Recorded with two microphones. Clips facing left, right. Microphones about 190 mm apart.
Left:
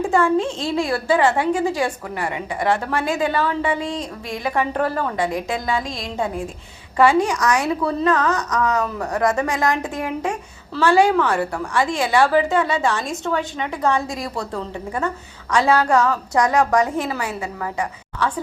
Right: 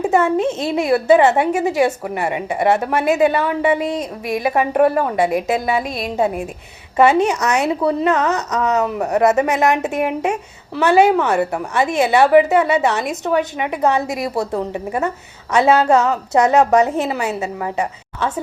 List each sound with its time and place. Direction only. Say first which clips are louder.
0.0 s a woman's voice: right 2 dB; 20° right (ahead or behind)
6.9 s a woman's voice: right 3 dB; 20° right (ahead or behind)